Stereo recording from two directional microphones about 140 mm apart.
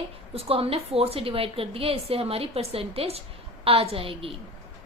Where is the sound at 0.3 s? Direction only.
45° right (ahead or behind).